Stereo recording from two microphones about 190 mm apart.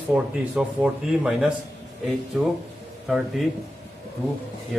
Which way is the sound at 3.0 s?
Centre (ahead or behind).